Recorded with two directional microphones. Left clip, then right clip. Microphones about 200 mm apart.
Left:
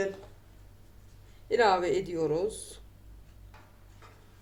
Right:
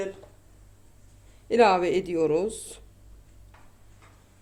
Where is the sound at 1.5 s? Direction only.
50° right (ahead or behind).